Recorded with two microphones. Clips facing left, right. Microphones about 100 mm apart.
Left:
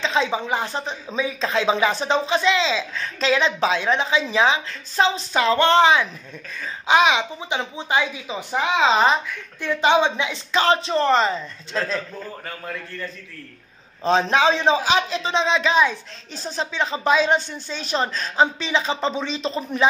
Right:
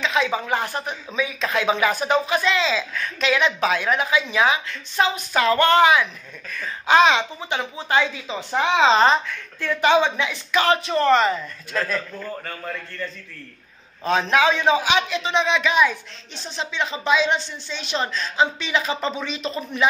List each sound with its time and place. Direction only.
0.0 s a sound: 30° left (ahead or behind)
0.3 s speech: 20° left (ahead or behind)
7.0 s a woman's voice: 10° left (ahead or behind)
9.6 s speech: 20° left (ahead or behind)
14.0 s speech: 30° left (ahead or behind)
16.3 s speech: 40° left (ahead or behind)